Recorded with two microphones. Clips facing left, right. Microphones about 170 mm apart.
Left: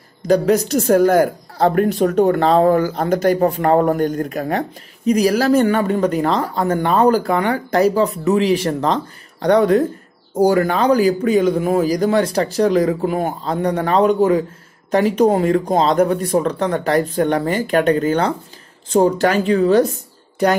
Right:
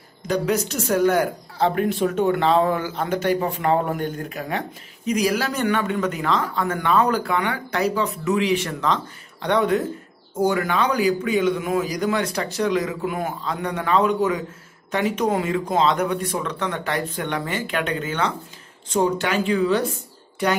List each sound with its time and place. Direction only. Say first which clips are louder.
0.3 s a woman's voice: left 8 dB; 35° left (ahead or behind)